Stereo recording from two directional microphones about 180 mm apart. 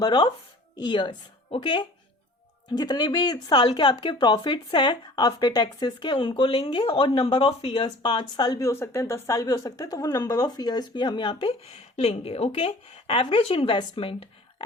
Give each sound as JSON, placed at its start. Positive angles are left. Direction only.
{"t": 0.0, "sound": "speech", "side_deg": 25}